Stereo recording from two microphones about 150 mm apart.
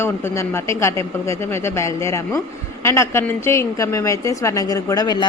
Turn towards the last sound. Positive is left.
turn(degrees=25)  # may be behind; listen again after turning